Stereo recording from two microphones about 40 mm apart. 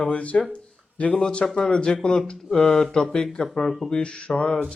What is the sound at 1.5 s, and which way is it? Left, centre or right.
Speech, left.